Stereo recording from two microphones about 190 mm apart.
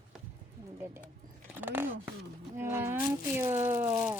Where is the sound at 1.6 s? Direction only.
10° right (ahead or behind).